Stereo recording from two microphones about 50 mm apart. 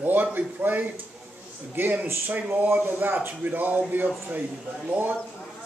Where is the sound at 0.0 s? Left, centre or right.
Right.